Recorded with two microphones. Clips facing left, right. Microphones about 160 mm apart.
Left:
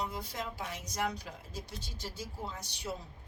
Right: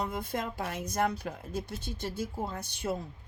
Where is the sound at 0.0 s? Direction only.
50° right (ahead or behind).